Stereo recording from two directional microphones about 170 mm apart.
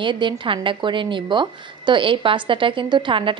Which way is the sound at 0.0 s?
30° right (ahead or behind).